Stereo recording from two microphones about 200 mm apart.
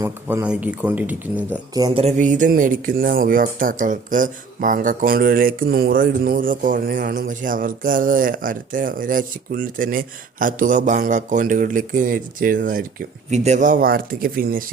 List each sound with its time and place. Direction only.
0.0 s speech: 10° right (ahead or behind)
1.7 s speech: 25° right (ahead or behind); by 14.6 s 45° right (ahead or behind)